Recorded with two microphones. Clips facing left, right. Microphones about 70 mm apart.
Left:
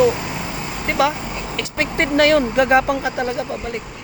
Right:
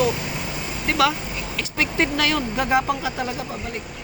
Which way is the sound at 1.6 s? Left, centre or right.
Left.